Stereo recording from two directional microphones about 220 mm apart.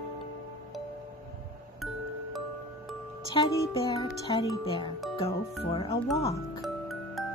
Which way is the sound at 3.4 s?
20° left (ahead or behind).